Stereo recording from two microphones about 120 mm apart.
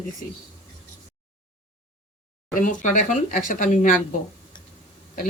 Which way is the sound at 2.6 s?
90° left.